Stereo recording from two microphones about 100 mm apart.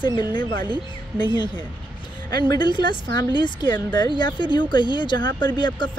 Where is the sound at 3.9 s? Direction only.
50° left (ahead or behind).